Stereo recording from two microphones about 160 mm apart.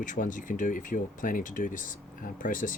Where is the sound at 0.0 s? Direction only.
55° left (ahead or behind).